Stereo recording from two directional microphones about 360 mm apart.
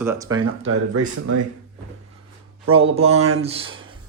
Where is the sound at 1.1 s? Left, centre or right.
Right.